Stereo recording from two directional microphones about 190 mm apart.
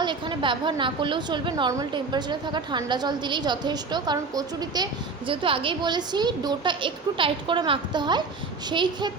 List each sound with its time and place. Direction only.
0.0 s a woman's voice: 25° right (ahead or behind)